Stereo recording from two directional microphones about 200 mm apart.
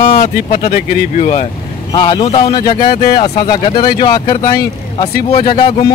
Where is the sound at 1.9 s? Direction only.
20° left (ahead or behind).